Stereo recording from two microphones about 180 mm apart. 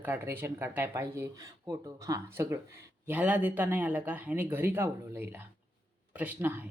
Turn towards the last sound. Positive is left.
turn(degrees=-10)  # may be behind; listen again after turning